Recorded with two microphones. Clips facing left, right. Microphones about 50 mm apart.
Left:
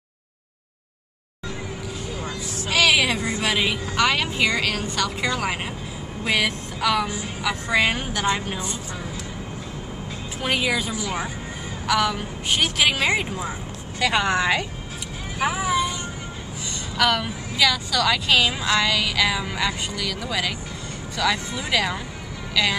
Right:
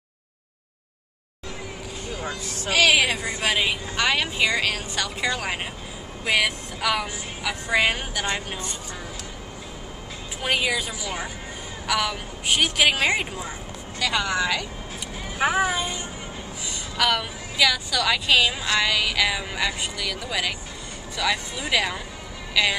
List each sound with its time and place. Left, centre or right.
2.7 s a woman's voice: centre
10.4 s a woman's voice: centre
13.9 s speech: left
15.4 s speech: right
16.9 s a woman's voice: centre